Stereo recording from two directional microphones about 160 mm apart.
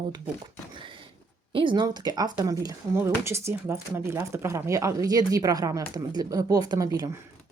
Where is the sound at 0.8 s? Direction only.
30° right (ahead or behind).